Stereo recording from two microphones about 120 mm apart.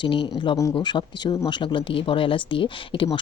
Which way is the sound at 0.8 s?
40° left (ahead or behind).